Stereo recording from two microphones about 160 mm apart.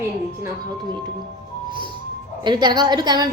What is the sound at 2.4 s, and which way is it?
Speech, 30° right (ahead or behind).